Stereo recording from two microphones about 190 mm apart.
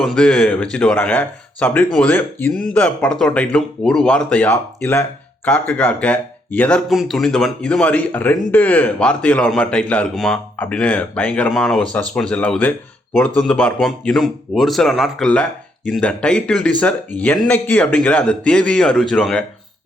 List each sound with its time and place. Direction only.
0.0 s speech: 5° left (ahead or behind)